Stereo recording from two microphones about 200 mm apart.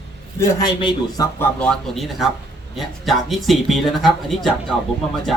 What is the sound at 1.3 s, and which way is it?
Speech, 5° left (ahead or behind).